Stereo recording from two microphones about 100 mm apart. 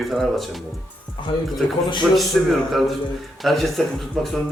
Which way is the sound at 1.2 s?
50° left (ahead or behind).